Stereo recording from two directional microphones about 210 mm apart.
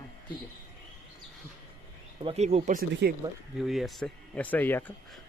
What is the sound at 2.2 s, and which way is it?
Speech, 30° right (ahead or behind).